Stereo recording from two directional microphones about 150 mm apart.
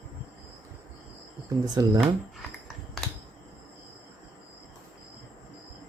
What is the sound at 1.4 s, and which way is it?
Speech, 25° right (ahead or behind).